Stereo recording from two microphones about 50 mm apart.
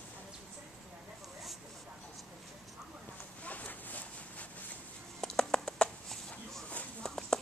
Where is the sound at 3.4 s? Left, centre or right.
Left.